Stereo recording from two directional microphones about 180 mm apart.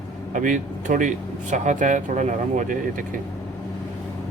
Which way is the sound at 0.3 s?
45° right (ahead or behind).